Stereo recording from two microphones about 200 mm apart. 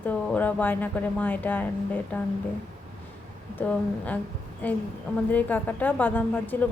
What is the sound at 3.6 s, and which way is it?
Speech, 5° left (ahead or behind).